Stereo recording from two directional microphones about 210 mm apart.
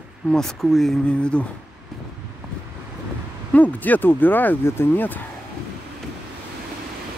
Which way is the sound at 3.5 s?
10° left (ahead or behind).